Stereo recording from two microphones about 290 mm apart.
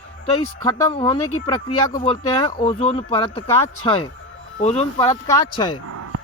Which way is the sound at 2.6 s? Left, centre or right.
Left.